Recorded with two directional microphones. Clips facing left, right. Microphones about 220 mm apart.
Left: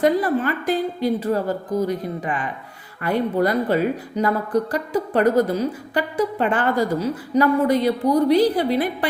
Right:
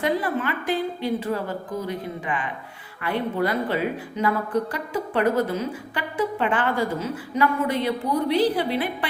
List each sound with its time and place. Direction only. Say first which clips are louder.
0.0 s a woman's voice: left 6 dB; 40° left (ahead or behind)